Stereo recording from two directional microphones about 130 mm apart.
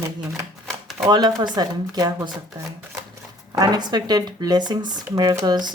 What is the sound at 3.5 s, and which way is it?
Speech, 30° right (ahead or behind).